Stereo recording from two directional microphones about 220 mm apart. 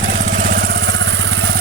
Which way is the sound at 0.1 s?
35° right (ahead or behind).